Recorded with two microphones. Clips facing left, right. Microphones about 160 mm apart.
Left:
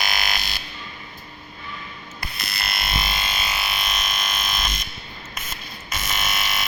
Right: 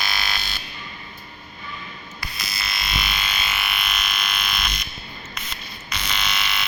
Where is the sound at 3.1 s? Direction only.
40° left (ahead or behind).